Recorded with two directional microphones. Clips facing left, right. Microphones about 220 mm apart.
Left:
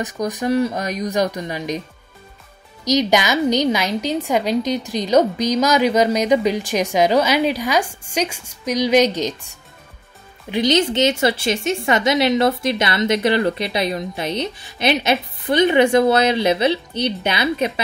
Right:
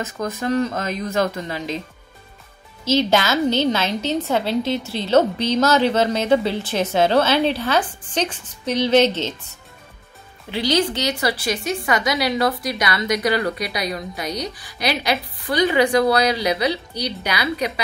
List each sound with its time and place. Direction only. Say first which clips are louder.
0.0 s a woman's voice: left 3 dB; 15° left (ahead or behind)
2.8 s a woman's voice: left 1 dB; 15° left (ahead or behind)